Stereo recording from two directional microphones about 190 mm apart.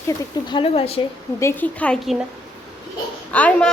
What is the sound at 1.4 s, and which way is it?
Speech, 10° left (ahead or behind).